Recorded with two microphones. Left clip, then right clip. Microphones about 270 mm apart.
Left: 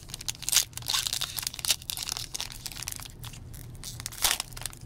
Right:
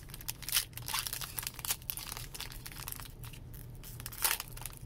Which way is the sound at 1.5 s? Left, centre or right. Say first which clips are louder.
Left 11 dB; centre.